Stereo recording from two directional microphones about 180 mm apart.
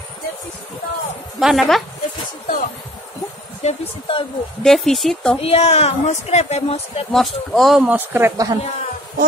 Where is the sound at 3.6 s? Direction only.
30° left (ahead or behind).